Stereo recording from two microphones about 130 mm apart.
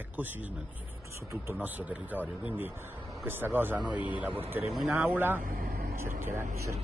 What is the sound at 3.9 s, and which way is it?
Speech, 35° left (ahead or behind).